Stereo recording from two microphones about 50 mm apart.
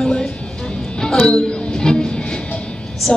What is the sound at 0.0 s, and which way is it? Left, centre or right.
Music, centre.